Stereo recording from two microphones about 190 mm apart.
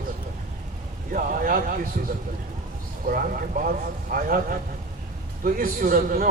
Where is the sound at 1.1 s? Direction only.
45° right (ahead or behind).